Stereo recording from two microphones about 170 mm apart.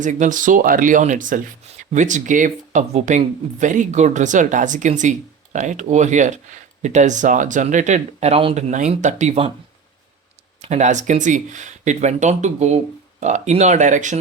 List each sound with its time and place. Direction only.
0.0 s speech: 50° right (ahead or behind)
8.7 s speech: 45° right (ahead or behind)
10.7 s speech: 45° right (ahead or behind)